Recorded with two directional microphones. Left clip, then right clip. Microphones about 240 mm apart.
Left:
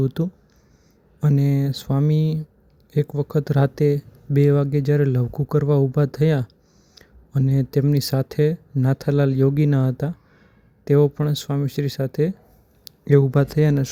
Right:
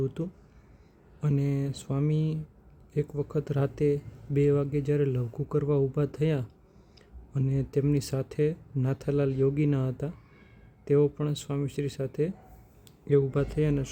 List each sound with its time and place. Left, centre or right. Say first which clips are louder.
0.0 s speech: left 7 dB; centre